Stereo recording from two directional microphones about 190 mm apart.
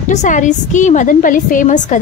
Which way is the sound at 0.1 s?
40° left (ahead or behind).